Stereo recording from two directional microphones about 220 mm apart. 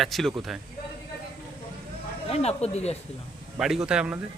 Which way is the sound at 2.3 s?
30° left (ahead or behind).